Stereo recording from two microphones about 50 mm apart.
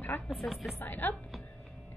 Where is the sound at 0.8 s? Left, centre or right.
Left.